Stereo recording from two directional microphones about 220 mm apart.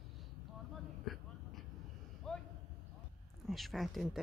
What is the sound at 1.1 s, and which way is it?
Vehicle, centre (ahead or behind).